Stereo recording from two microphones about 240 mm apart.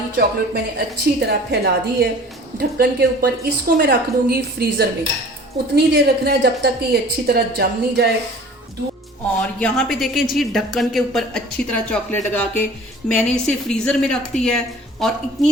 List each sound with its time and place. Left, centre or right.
0.2 s a woman's voice: right
9.6 s a woman's voice: centre